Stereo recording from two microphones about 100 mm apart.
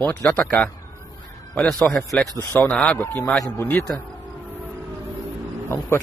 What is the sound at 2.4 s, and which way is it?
Speech, 15° left (ahead or behind).